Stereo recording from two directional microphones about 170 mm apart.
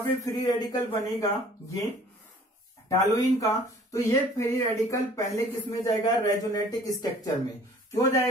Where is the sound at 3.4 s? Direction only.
20° left (ahead or behind).